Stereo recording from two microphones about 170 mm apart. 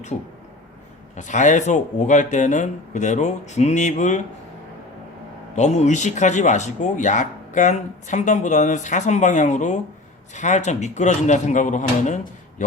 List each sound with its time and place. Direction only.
1.1 s speech: 45° left (ahead or behind)
5.5 s speech: 40° left (ahead or behind)